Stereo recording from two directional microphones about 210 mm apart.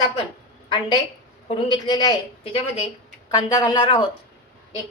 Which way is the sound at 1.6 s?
20° left (ahead or behind).